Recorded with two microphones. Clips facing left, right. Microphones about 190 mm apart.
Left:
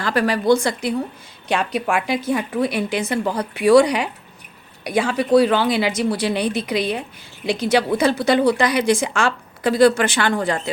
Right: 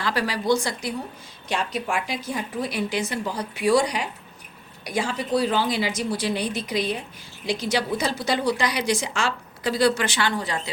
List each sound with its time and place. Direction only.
0.0 s a woman's voice: 50° left (ahead or behind)